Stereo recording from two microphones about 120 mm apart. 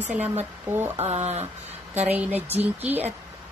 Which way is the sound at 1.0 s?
65° right (ahead or behind).